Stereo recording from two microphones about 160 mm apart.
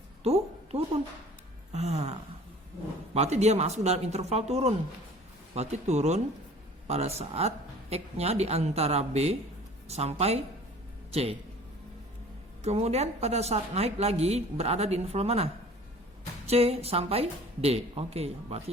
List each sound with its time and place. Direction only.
0.2 s a sound: 40° right (ahead or behind)
1.7 s a woman's voice: 40° right (ahead or behind)
3.2 s a woman's voice: 45° right (ahead or behind)
12.6 s a woman's voice: 40° right (ahead or behind)
16.5 s a woman's voice: 40° right (ahead or behind)